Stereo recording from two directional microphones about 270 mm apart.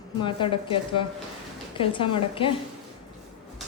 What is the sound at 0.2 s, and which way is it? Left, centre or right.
A woman's voice, centre.